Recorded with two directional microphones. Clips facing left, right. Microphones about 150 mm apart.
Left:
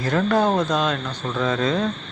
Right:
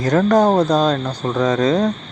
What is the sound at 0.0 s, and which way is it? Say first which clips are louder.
Speech: right 6 dB; 45° right (ahead or behind).